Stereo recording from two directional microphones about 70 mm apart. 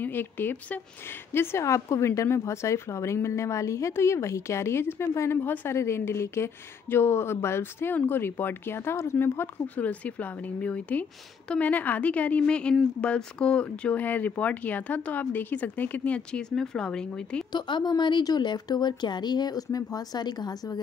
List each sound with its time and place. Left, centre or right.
0.0 s a woman's voice: left
5.5 s speech: left
5.8 s speech: left
9.8 s speech: left
17.5 s speech: left